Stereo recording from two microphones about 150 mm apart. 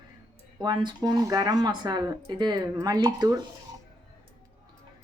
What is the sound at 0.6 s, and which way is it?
Speech, 30° right (ahead or behind).